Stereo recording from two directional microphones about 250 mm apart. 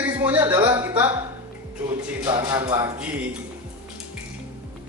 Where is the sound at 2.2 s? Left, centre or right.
Centre.